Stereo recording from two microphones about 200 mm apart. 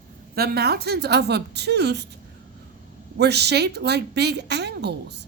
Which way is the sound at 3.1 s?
55° right (ahead or behind).